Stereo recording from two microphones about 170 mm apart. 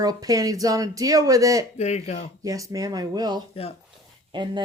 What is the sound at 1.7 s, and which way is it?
Speech, 40° left (ahead or behind).